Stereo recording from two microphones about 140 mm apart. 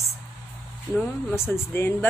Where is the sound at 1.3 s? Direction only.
15° left (ahead or behind).